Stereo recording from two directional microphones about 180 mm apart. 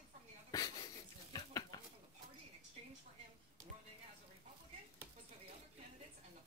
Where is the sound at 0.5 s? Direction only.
20° left (ahead or behind).